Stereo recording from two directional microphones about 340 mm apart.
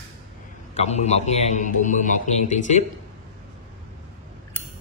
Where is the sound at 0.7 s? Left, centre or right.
Centre.